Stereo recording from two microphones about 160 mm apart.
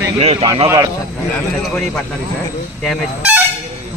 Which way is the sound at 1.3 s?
5° left (ahead or behind).